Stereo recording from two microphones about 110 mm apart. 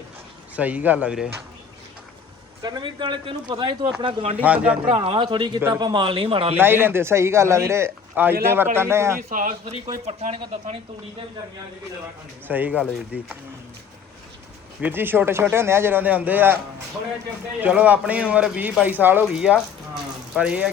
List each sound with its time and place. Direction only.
0.5 s speech: 15° right (ahead or behind)
2.6 s speech: 40° right (ahead or behind)
4.4 s speech: 10° right (ahead or behind)
4.9 s speech: 50° right (ahead or behind)
5.5 s a man's voice: 25° right (ahead or behind)
5.8 s speech: 45° right (ahead or behind); by 6.6 s 60° right (ahead or behind)
6.6 s a man's voice: 20° right (ahead or behind)
9.8 s speech: 75° right (ahead or behind)
12.5 s speech: 15° right (ahead or behind)
14.8 s a man's voice: 15° right (ahead or behind)
17.6 s speech: 15° right (ahead or behind)